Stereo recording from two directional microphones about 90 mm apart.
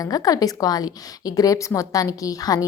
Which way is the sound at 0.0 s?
45° left (ahead or behind).